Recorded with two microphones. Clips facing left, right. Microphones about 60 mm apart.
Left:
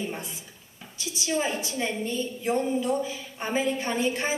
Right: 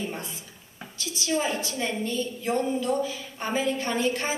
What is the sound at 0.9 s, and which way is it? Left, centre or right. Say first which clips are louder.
A woman's voice: right 1 dB; centre.